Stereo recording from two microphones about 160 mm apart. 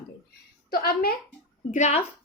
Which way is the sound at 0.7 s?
70° left (ahead or behind).